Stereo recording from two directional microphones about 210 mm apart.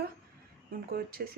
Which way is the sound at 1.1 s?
45° right (ahead or behind).